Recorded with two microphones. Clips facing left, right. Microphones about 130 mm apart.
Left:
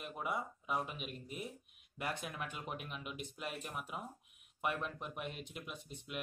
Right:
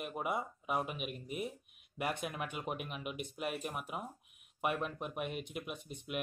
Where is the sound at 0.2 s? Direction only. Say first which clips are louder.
Right 2 dB; 10° right (ahead or behind).